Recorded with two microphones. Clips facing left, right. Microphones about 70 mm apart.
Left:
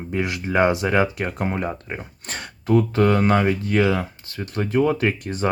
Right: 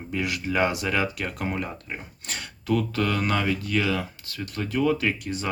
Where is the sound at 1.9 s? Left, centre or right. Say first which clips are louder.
Left 4 dB; left.